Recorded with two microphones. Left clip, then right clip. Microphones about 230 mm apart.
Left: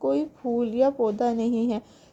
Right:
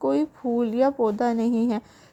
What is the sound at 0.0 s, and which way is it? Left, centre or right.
A woman's voice, right.